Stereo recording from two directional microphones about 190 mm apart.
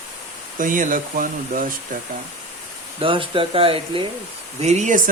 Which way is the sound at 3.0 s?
30° right (ahead or behind).